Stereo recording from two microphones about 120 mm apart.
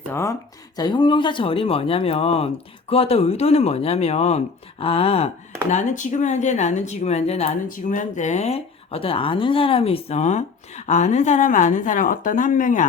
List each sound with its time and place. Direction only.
0.1 s a sound: 20° left (ahead or behind)
0.8 s speech: 40° left (ahead or behind); by 5.3 s 55° left (ahead or behind)
5.7 s speech: 90° left